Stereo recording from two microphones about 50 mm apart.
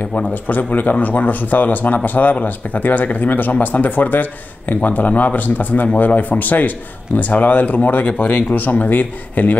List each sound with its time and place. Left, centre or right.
0.3 s speech: left